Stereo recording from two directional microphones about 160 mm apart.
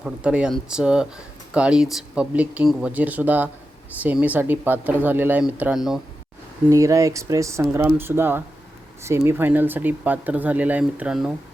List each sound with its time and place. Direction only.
0.0 s speech: 5° right (ahead or behind)
6.7 s speech: 20° right (ahead or behind)